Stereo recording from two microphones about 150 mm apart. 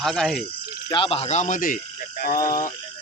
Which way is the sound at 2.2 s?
75° left (ahead or behind).